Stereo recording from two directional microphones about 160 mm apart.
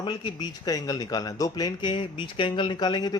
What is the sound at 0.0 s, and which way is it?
Speech, 30° left (ahead or behind).